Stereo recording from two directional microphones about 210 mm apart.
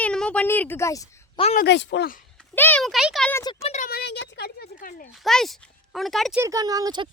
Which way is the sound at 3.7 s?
45° left (ahead or behind).